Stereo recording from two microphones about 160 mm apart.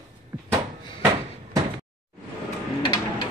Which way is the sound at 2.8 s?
30° left (ahead or behind).